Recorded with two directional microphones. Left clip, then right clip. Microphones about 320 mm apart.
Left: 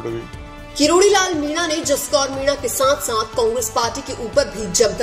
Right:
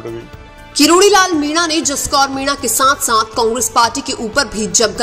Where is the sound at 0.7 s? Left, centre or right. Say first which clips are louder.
Right 5 dB; right.